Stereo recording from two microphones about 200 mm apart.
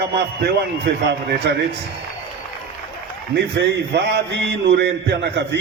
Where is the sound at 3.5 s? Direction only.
55° right (ahead or behind).